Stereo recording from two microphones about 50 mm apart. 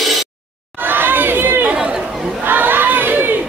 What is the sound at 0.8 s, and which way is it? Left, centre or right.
Crowd, right.